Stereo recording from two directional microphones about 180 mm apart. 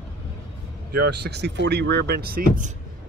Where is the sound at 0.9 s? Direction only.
60° right (ahead or behind).